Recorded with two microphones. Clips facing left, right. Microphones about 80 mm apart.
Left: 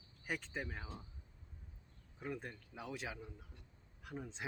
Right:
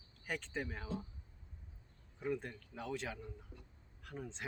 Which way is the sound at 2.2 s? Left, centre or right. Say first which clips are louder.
Right 5 dB; centre.